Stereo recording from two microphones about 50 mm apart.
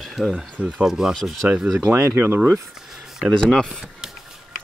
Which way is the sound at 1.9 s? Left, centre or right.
Right.